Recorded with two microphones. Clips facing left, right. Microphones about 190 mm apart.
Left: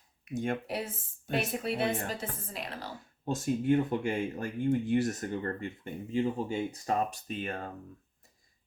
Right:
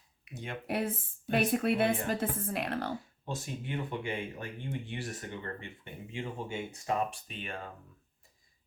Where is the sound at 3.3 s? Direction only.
45° left (ahead or behind).